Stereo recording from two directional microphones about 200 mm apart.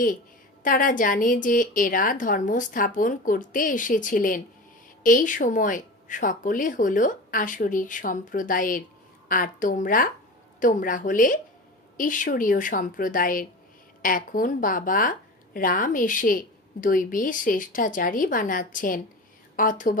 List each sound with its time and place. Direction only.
0.6 s a woman's voice: 40° left (ahead or behind)